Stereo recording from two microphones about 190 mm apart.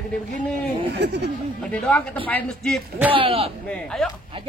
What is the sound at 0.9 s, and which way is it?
Speech, 65° right (ahead or behind).